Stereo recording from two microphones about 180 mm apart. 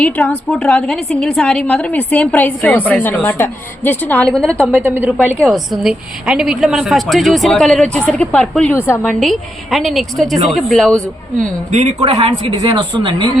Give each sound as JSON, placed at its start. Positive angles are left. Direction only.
{"t": 0.0, "sound": "a woman's voice", "side_deg": 5}
{"t": 4.6, "sound": "a woman's voice", "side_deg": -10}
{"t": 11.7, "sound": "a woman's voice", "side_deg": -35}